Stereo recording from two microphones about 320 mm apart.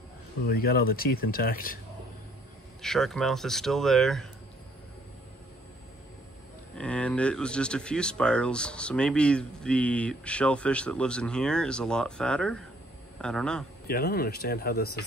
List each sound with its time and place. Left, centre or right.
0.5 s speech: left
2.8 s speech: centre
6.8 s speech: centre
13.8 s speech: left